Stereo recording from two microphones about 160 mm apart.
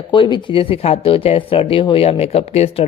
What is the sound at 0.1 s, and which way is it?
Speech, 30° left (ahead or behind).